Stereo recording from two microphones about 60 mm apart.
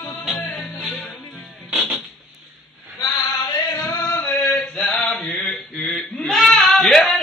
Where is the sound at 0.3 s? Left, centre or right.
Centre.